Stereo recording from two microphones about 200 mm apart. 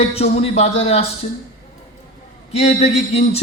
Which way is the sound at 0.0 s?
30° left (ahead or behind).